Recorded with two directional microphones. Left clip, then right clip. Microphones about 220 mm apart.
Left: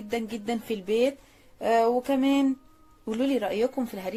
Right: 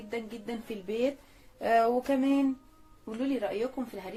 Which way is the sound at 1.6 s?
20° left (ahead or behind).